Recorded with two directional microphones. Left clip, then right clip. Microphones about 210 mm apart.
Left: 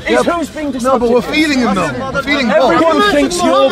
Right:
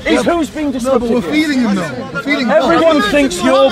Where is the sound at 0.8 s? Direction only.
25° left (ahead or behind).